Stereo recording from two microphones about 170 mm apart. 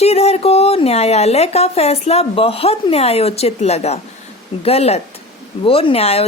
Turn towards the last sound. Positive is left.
turn(degrees=35)  # may be behind; listen again after turning